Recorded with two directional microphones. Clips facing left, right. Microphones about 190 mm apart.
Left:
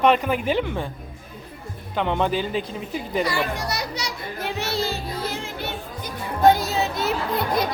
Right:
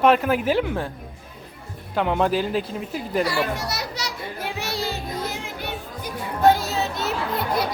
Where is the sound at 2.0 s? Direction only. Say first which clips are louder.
Right 2 dB; 5° right (ahead or behind).